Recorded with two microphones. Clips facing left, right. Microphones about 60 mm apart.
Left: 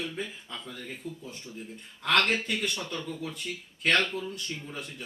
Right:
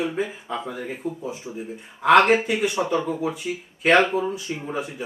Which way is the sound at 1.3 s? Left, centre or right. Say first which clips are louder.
Right 9 dB; centre.